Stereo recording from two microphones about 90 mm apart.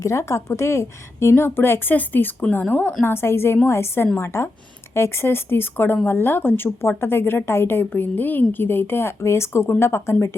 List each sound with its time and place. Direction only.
0.0 s a woman's voice: 35° left (ahead or behind)